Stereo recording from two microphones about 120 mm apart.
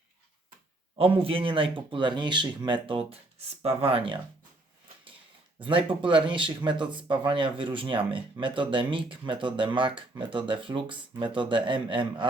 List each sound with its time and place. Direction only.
0.9 s speech: 50° right (ahead or behind)
5.5 s speech: 45° right (ahead or behind)